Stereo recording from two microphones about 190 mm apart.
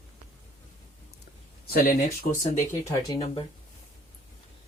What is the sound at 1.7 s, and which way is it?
Speech, 50° left (ahead or behind).